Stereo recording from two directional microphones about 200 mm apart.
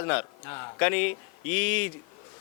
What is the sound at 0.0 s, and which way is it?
A man's voice, 10° left (ahead or behind).